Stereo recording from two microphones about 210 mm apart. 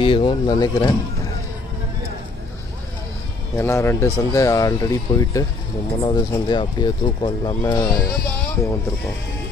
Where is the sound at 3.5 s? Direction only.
10° left (ahead or behind).